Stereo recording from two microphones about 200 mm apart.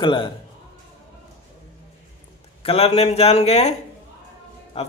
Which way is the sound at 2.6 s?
30° left (ahead or behind).